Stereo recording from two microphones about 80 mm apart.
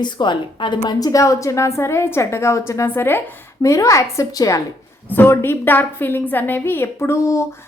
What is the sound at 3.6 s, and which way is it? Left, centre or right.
Speech, left.